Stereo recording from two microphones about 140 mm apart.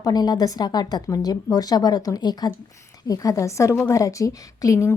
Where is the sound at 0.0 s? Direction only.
30° left (ahead or behind).